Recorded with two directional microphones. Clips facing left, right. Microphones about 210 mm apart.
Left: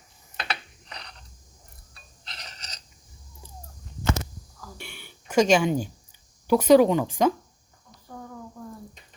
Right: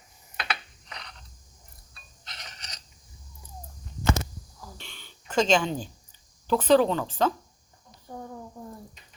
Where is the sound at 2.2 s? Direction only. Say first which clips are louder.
Left 1 dB; 30° left (ahead or behind).